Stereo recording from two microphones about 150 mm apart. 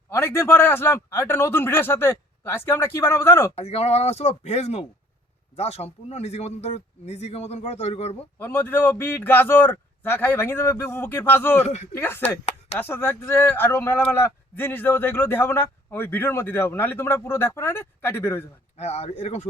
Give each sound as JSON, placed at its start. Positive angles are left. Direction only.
{"t": 0.1, "sound": "speech", "side_deg": 15}
{"t": 3.5, "sound": "speech", "side_deg": 45}
{"t": 8.4, "sound": "speech", "side_deg": 15}
{"t": 18.8, "sound": "speech", "side_deg": 45}